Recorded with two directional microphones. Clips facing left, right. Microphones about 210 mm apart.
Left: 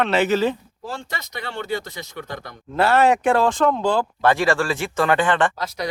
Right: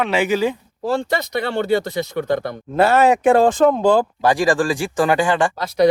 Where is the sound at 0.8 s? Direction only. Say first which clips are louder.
Right 15 dB; 65° right (ahead or behind).